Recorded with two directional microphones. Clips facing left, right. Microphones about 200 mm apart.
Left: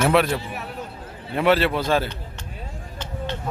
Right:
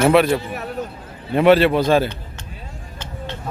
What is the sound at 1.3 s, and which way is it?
Speech, 20° right (ahead or behind).